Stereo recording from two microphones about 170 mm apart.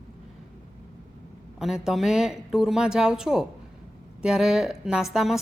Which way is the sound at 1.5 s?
5° right (ahead or behind).